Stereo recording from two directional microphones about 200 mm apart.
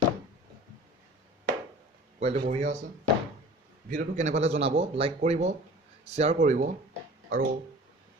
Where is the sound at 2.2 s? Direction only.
30° right (ahead or behind).